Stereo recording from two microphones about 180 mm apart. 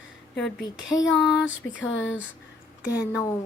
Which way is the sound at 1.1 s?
Centre (ahead or behind).